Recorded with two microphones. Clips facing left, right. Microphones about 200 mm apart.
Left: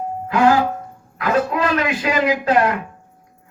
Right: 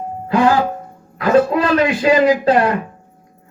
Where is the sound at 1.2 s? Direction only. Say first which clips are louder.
Right 5 dB; 30° right (ahead or behind).